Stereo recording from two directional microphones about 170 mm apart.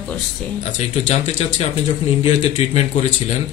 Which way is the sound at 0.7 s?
45° left (ahead or behind).